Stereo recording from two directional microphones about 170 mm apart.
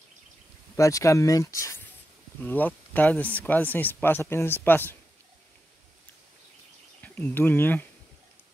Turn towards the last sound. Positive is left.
turn(degrees=10)  # may be behind; listen again after turning